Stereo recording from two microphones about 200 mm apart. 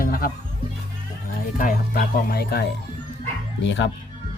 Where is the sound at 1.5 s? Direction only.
45° left (ahead or behind).